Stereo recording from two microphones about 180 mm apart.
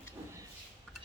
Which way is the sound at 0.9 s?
Centre (ahead or behind).